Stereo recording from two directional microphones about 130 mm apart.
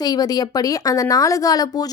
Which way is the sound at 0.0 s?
30° left (ahead or behind).